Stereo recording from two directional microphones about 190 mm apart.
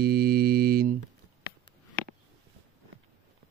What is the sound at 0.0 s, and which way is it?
Mantra, 55° right (ahead or behind).